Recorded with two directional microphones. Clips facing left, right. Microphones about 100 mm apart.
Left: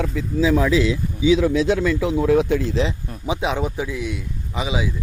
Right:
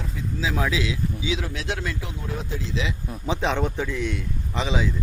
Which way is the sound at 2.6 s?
50° left (ahead or behind).